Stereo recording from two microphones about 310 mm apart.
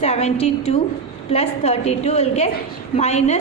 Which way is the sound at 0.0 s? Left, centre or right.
Left.